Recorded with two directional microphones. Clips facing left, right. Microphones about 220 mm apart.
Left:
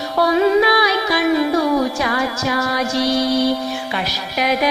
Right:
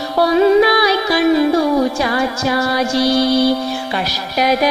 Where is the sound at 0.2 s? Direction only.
35° right (ahead or behind).